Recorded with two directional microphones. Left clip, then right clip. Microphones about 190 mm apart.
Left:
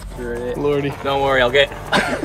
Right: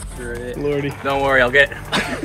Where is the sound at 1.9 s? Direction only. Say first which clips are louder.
Left 3 dB; 60° left (ahead or behind).